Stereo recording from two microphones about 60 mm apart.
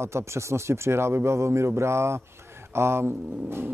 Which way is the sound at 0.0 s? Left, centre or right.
Right.